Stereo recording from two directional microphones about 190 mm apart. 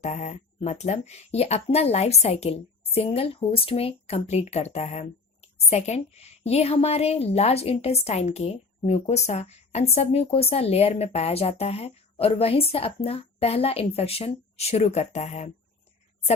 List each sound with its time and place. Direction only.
0.0 s speech: 35° left (ahead or behind)